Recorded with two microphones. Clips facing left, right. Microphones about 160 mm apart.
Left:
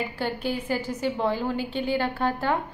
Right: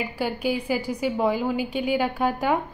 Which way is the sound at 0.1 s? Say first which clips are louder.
Right 3 dB; 10° right (ahead or behind).